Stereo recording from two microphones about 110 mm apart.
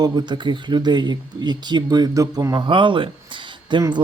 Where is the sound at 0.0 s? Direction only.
40° right (ahead or behind).